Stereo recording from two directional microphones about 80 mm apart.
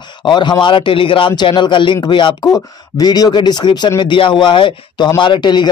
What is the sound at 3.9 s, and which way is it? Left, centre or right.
A man's voice, left.